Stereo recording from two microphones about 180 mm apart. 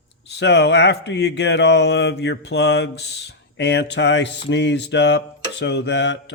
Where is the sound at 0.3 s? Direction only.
70° left (ahead or behind).